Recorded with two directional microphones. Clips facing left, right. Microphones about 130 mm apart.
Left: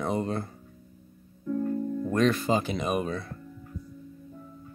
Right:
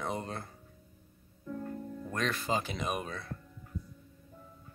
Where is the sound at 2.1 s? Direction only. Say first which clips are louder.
Left 8 dB; 25° left (ahead or behind).